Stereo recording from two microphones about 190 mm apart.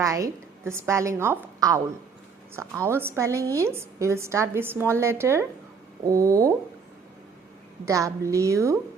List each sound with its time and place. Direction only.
0.0 s a woman's voice: 15° right (ahead or behind)
7.9 s a woman's voice: 15° right (ahead or behind)